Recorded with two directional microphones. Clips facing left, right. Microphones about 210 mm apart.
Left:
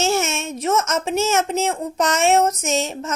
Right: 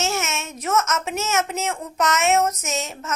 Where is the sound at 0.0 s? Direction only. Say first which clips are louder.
Left 5 dB; 30° left (ahead or behind).